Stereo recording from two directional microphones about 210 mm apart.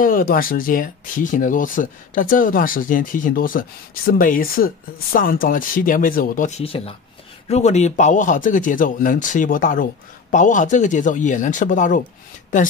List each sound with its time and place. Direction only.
0.0 s speech: 45° left (ahead or behind)